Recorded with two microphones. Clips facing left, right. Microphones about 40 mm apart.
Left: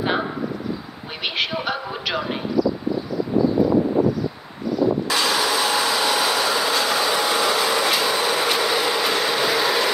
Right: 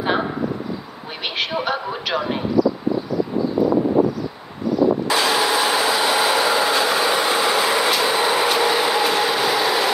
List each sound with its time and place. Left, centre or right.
1.2 s a sound: centre
5.1 s train: right
8.5 s vehicle: centre